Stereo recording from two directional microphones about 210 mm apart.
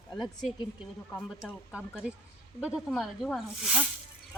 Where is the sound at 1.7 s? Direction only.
5° right (ahead or behind).